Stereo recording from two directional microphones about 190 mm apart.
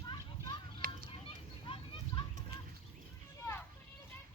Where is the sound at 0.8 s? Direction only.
50° right (ahead or behind).